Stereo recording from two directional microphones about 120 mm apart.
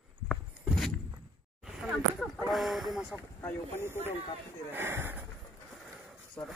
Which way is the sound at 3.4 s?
20° left (ahead or behind).